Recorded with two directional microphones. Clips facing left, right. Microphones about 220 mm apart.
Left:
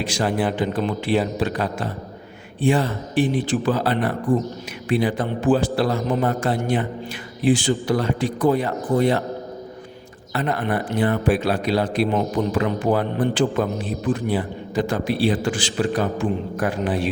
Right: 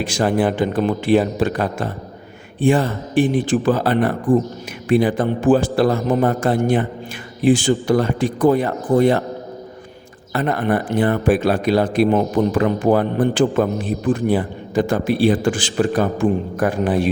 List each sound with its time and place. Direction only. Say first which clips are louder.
0.0 s a man's voice: right 4 dB; 50° right (ahead or behind)
10.3 s a man's voice: right 4 dB; 50° right (ahead or behind)